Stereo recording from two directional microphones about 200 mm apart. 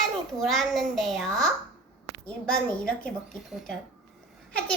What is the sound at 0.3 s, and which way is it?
A child's voice, centre (ahead or behind).